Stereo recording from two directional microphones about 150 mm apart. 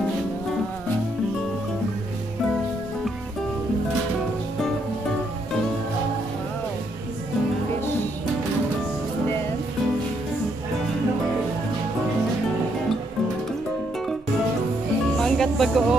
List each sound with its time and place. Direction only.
15.1 s music: 5° left (ahead or behind)